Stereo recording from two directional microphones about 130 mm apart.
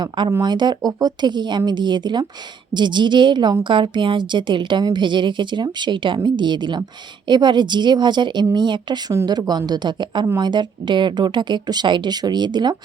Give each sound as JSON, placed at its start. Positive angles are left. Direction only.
{"t": 0.4, "sound": "a woman's voice", "side_deg": -35}